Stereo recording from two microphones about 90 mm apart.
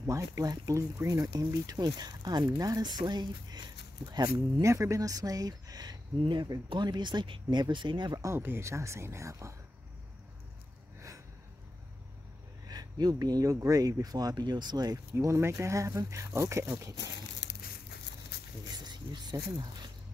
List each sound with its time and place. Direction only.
0.0 s speech: 35° right (ahead or behind); by 8.2 s 60° right (ahead or behind)
8.4 s speech: 25° right (ahead or behind)
12.6 s speech: 45° right (ahead or behind)
15.1 s speech: 30° right (ahead or behind)
18.9 s speech: 50° right (ahead or behind)